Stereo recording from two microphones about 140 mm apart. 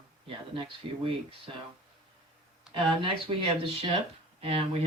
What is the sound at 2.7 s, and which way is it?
Speech, 40° right (ahead or behind).